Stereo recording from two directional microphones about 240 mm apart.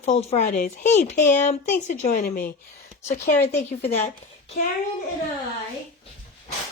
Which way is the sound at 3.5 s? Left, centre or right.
Left.